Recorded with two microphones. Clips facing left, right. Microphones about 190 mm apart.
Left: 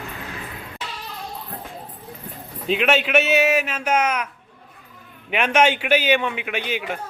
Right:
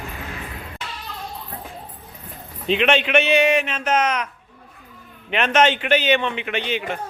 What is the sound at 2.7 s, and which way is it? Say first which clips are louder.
A man's voice: right 1 dB; 5° left (ahead or behind).